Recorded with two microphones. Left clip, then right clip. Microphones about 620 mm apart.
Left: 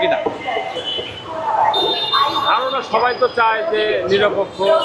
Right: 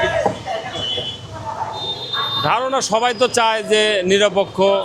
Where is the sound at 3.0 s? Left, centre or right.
Right.